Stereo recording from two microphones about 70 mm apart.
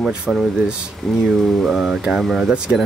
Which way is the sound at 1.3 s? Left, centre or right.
Centre.